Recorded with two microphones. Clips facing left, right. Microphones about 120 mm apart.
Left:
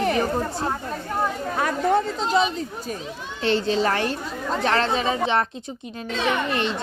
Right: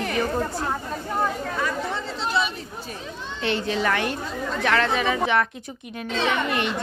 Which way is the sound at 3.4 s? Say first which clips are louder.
Left 4 dB; 30° left (ahead or behind).